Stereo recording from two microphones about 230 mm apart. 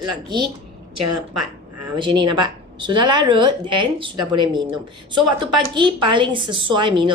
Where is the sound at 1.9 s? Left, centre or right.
Right.